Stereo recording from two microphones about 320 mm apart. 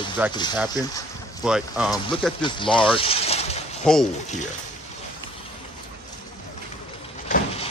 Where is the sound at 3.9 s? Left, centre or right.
Centre.